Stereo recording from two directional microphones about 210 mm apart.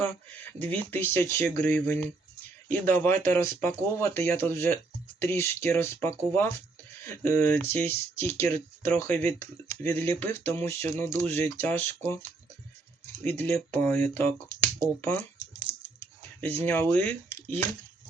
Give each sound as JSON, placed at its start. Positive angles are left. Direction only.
{"t": 0.0, "sound": "speech", "side_deg": 10}
{"t": 13.3, "sound": "speech", "side_deg": 10}
{"t": 15.7, "sound": "typing", "side_deg": -25}
{"t": 16.4, "sound": "speech", "side_deg": 10}